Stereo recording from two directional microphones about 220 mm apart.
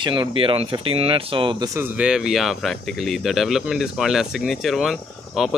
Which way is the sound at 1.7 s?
10° right (ahead or behind).